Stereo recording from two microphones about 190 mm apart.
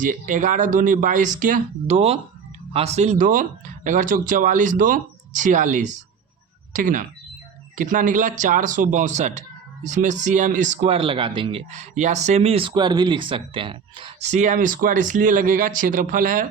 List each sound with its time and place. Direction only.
0.0 s speech: 45° right (ahead or behind)